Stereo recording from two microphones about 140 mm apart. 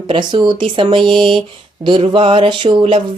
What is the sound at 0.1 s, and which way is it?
Speech, 35° right (ahead or behind).